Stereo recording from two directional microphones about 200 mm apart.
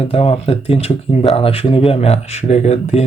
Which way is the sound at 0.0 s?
30° left (ahead or behind).